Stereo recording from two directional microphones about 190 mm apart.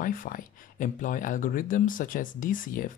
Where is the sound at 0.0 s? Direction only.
45° left (ahead or behind).